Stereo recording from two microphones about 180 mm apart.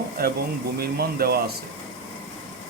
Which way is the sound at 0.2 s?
60° right (ahead or behind).